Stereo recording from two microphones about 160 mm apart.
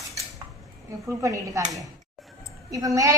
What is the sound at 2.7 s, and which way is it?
Speech, 20° right (ahead or behind).